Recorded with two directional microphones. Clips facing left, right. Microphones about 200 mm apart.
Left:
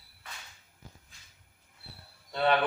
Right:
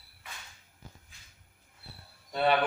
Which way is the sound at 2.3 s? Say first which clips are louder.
Even; 10° right (ahead or behind).